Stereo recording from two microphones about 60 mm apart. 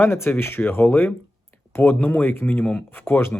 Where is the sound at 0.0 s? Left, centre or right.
Left.